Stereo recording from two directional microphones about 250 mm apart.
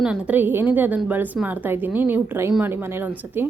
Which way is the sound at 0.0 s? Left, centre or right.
Centre.